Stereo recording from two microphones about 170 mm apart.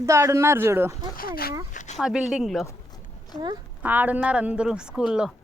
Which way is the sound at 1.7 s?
50° left (ahead or behind).